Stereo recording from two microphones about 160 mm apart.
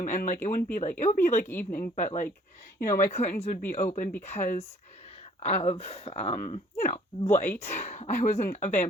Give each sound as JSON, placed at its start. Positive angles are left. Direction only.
{"t": 0.0, "sound": "speech", "side_deg": 55}
{"t": 1.5, "sound": "a woman's voice", "side_deg": 10}
{"t": 1.8, "sound": "speech", "side_deg": 50}
{"t": 2.7, "sound": "a woman's voice", "side_deg": 20}
{"t": 3.1, "sound": "speech", "side_deg": 45}